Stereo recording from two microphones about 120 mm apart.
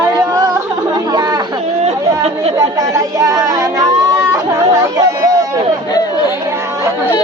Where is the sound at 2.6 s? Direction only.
30° right (ahead or behind).